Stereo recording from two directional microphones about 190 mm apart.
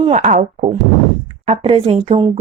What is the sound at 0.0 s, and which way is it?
A woman's voice, 35° right (ahead or behind).